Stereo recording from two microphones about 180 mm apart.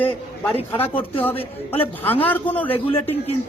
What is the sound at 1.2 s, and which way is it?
A woman's voice, 10° left (ahead or behind).